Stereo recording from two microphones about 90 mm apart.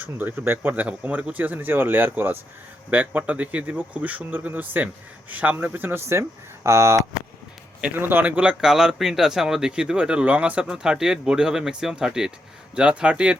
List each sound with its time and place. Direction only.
0.0 s speech: 20° right (ahead or behind)